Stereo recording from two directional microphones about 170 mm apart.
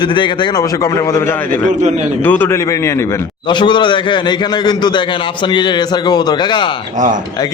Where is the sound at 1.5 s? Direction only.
45° right (ahead or behind).